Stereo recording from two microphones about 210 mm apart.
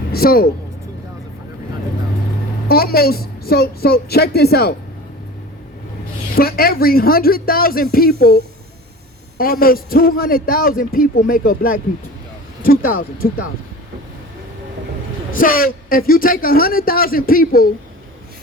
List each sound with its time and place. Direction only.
0.1 s speech: 45° left (ahead or behind)
2.6 s a man's voice: 45° left (ahead or behind)
6.3 s a man's voice: 45° left (ahead or behind)
9.4 s a man's voice: 45° left (ahead or behind)
15.4 s a man's voice: 40° left (ahead or behind)